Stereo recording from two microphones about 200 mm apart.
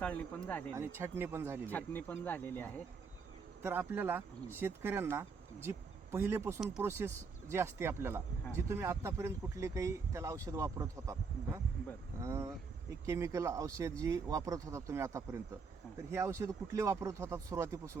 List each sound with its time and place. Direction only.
0.0 s speech: 5° left (ahead or behind)
0.8 s speech: 10° right (ahead or behind)
1.6 s speech: 10° left (ahead or behind)
3.6 s speech: 10° right (ahead or behind)